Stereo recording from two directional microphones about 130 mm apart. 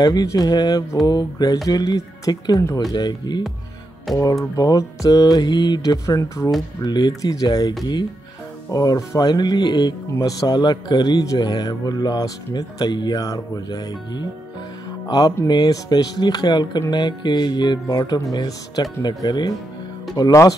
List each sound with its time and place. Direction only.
0.0 s music: 30° left (ahead or behind)
1.7 s mantra: 30° left (ahead or behind)
2.9 s music: 30° left (ahead or behind)
4.1 s speech: centre (ahead or behind)
4.6 s mantra: 25° left (ahead or behind)
6.8 s music: 30° left (ahead or behind)
20.2 s mantra: 25° left (ahead or behind)